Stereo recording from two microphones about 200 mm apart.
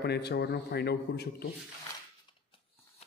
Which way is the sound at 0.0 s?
55° left (ahead or behind).